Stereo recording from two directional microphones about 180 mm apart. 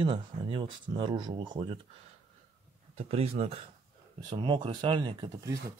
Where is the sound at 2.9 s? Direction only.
35° right (ahead or behind).